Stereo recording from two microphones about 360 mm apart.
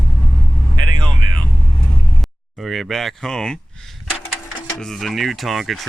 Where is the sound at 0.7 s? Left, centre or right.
Right.